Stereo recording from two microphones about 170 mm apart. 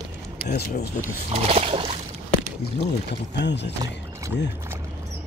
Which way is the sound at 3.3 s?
90° left.